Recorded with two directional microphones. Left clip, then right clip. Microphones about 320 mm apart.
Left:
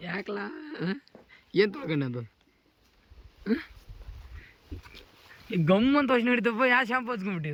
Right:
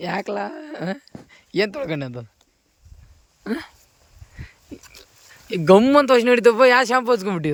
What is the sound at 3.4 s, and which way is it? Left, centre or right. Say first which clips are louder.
Speech: right 3 dB; centre.